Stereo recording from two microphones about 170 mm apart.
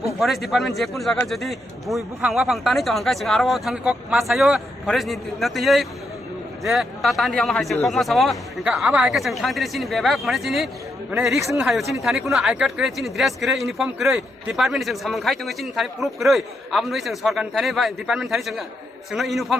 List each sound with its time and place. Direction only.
0.2 s speech: centre (ahead or behind)